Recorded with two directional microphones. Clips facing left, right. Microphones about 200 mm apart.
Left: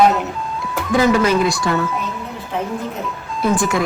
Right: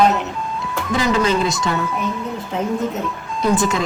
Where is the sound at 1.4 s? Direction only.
20° right (ahead or behind).